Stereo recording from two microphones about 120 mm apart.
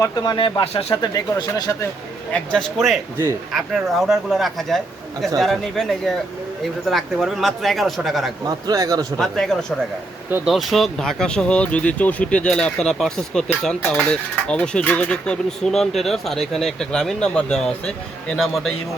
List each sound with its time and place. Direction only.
0.0 s speech: 35° left (ahead or behind); by 1.1 s 55° left (ahead or behind)
1.1 s speech: 35° left (ahead or behind)
2.3 s a man's voice: 5° left (ahead or behind)
8.4 s speech: 35° right (ahead or behind)
9.1 s speech: 5° left (ahead or behind)